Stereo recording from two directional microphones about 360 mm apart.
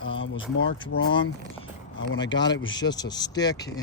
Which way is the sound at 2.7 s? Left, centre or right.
Centre.